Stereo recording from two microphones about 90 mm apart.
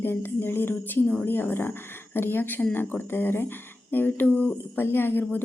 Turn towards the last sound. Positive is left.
turn(degrees=20)  # may be behind; listen again after turning